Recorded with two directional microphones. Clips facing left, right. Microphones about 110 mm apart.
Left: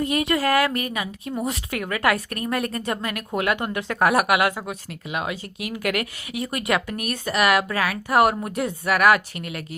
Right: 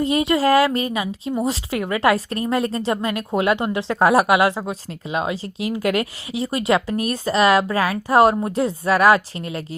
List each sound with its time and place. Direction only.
0.0 s speech: 25° right (ahead or behind)